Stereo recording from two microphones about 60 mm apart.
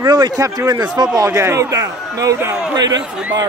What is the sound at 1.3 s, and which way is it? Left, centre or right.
A man's voice, right.